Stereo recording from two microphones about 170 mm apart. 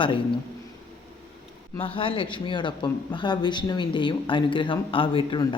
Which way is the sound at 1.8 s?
30° left (ahead or behind).